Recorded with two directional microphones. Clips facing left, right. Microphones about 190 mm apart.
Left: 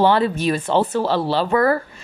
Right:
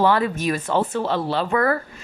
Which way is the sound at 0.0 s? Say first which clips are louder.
Left 3 dB; 30° left (ahead or behind).